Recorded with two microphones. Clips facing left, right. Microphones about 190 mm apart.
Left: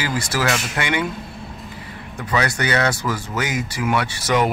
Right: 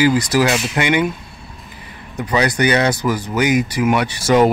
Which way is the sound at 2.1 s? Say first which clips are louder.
Right 5 dB; 20° right (ahead or behind).